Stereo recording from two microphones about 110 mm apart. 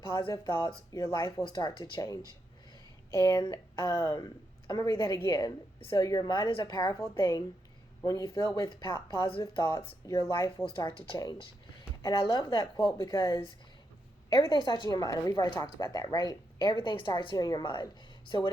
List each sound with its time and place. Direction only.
0.1 s speech: 40° left (ahead or behind)
10.7 s a woman's voice: 50° left (ahead or behind)